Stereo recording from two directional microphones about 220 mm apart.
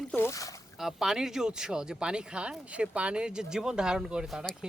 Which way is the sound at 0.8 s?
Centre (ahead or behind).